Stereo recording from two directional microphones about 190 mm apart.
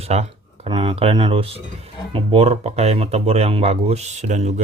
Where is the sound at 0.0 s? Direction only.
35° right (ahead or behind).